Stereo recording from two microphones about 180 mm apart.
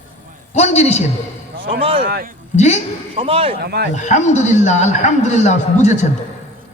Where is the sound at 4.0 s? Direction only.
40° left (ahead or behind).